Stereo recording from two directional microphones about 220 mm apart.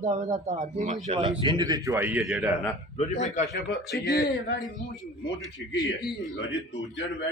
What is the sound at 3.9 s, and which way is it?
Speech, 45° left (ahead or behind).